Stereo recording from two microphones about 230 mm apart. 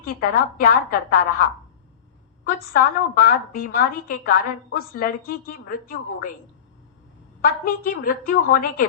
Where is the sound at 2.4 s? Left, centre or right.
Left.